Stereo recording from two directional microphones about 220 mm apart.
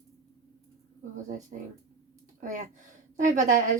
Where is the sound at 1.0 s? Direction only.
35° right (ahead or behind).